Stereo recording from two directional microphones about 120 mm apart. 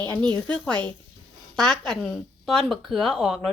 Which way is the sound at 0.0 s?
15° left (ahead or behind).